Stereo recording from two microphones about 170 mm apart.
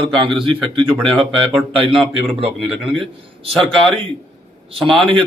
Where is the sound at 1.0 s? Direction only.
5° left (ahead or behind).